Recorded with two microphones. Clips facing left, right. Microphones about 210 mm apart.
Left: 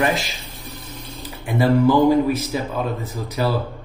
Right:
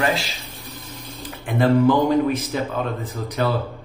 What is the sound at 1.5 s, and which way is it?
Speech, 10° left (ahead or behind).